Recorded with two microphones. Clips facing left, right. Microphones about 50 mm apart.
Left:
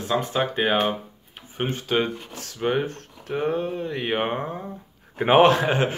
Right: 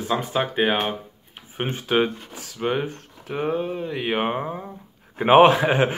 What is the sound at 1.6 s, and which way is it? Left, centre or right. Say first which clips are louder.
Speech: right 2 dB; centre.